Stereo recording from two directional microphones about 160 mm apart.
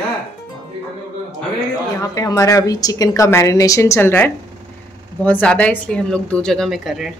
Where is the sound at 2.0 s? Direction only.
20° left (ahead or behind); by 7.1 s centre (ahead or behind).